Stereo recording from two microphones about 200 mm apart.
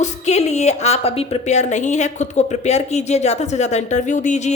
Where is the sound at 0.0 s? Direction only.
35° left (ahead or behind).